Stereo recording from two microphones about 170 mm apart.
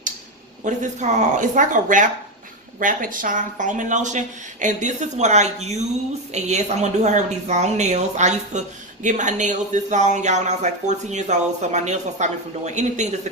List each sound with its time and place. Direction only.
0.6 s a woman's voice: 45° right (ahead or behind)